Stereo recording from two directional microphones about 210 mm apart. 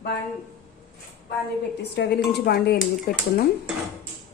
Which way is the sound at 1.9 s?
50° left (ahead or behind).